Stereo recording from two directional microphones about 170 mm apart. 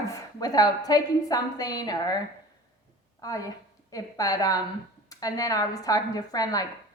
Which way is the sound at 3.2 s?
20° left (ahead or behind).